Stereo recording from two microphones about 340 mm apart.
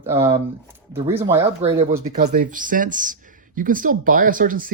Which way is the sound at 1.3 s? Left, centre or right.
Centre.